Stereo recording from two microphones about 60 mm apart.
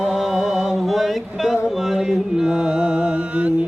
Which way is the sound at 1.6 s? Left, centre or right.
Centre.